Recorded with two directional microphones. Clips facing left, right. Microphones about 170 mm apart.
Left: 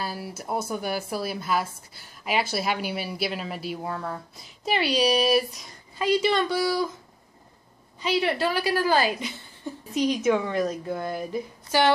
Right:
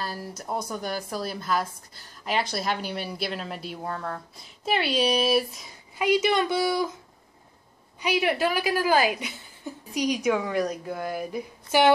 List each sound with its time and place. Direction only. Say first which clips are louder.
0.0 s speech: left 1 dB; 5° left (ahead or behind)
5.9 s a woman's voice: even; 15° right (ahead or behind)
8.0 s a woman's voice: even; 10° right (ahead or behind)